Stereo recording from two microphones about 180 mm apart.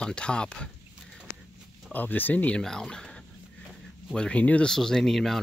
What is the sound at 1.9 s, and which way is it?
Speech, 10° left (ahead or behind).